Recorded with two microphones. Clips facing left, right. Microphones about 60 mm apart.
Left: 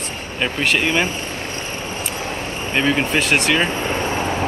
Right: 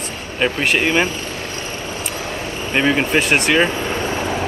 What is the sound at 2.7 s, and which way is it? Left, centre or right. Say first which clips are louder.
Speech: right 2 dB; centre.